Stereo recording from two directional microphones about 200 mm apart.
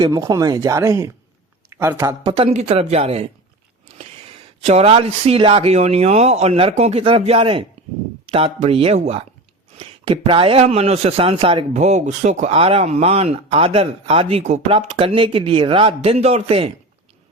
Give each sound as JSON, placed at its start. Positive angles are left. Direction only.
{"t": 0.0, "sound": "a man's voice", "side_deg": -20}
{"t": 4.6, "sound": "a man's voice", "side_deg": -30}